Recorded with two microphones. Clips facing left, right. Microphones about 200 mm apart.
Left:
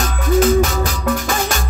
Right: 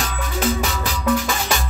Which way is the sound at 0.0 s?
45° left (ahead or behind).